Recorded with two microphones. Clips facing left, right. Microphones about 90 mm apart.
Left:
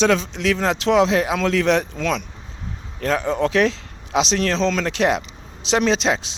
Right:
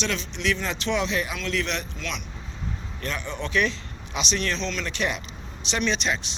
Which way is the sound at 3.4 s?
90° left.